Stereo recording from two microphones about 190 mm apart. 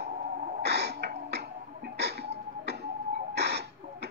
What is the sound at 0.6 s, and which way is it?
Music, 60° right (ahead or behind).